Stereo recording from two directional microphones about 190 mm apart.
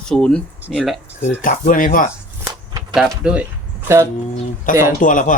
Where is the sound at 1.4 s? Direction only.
45° left (ahead or behind).